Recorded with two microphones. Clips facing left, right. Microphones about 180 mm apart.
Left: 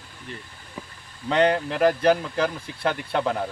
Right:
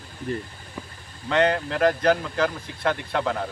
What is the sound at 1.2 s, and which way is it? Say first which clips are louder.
Speech: left 1 dB; 10° left (ahead or behind).